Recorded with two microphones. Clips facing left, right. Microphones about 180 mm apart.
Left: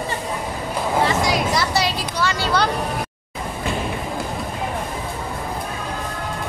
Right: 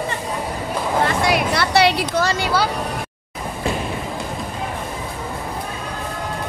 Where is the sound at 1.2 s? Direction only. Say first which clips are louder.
Right 1 dB; 60° right (ahead or behind).